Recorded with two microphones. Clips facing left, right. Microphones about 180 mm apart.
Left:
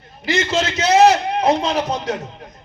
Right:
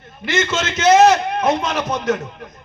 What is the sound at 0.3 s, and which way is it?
A man's voice, 35° left (ahead or behind).